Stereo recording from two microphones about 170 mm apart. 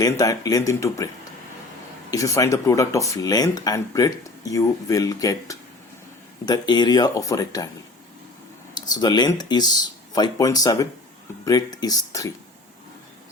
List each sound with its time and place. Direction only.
0.0 s speech: 20° left (ahead or behind)
8.7 s speech: 25° left (ahead or behind)